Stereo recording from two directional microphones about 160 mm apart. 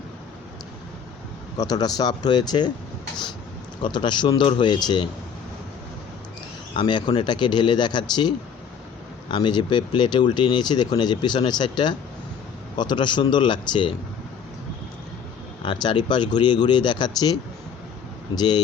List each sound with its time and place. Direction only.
1.5 s speech: 25° left (ahead or behind)
3.8 s speech: 30° left (ahead or behind)
6.7 s speech: 30° left (ahead or behind)
9.3 s speech: 30° left (ahead or behind)
15.6 s speech: 30° left (ahead or behind)
18.3 s speech: 25° left (ahead or behind)